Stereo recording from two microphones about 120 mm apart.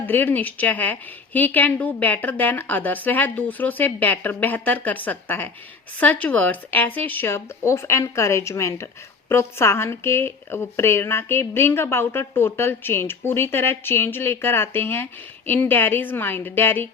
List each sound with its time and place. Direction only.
0.0 s a woman's voice: 15° left (ahead or behind)